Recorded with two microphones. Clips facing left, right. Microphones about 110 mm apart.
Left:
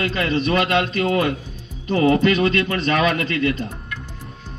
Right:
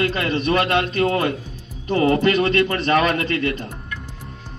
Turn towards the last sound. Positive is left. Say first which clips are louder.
# left 1 dB
turn(degrees=-30)  # may be behind; listen again after turning